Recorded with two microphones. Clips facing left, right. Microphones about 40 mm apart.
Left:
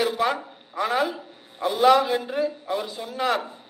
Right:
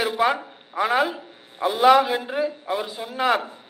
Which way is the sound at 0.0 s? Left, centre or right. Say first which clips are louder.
Right 2 dB; centre.